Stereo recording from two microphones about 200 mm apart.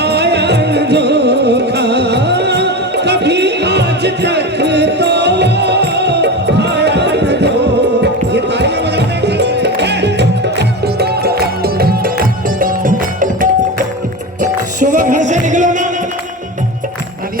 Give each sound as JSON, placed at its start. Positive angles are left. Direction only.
{"t": 0.0, "sound": "music", "side_deg": -55}